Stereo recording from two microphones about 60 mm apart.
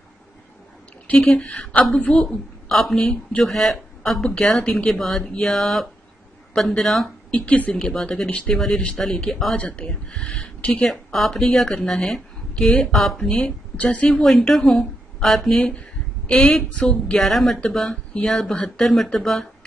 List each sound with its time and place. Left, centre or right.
1.1 s a woman's voice: centre
2.3 s a woman's voice: centre
4.9 s a woman's voice: centre
5.2 s a woman's voice: centre
5.5 s a woman's voice: centre
7.2 s a woman's voice: centre
7.7 s a woman's voice: centre
8.3 s a woman's voice: centre
9.6 s a woman's voice: left; by 13.3 s centre
13.3 s a woman's voice: centre
14.2 s a woman's voice: centre
17.2 s a woman's voice: centre